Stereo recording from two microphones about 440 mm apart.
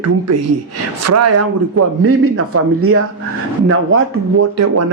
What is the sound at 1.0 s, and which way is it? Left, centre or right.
Speech, right.